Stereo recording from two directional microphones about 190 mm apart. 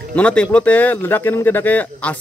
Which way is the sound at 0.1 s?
5° left (ahead or behind).